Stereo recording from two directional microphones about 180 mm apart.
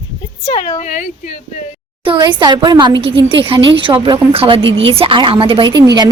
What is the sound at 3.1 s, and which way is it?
Speech, 85° right.